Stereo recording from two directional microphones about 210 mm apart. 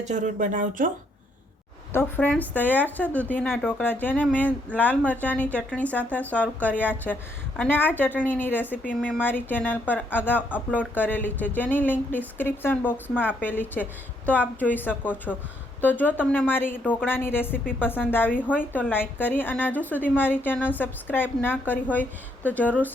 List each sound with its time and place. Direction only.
0.0 s speech: 35° right (ahead or behind)
1.9 s a woman's voice: 10° left (ahead or behind)